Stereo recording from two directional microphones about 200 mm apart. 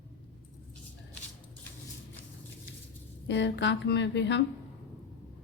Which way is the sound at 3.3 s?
65° left (ahead or behind).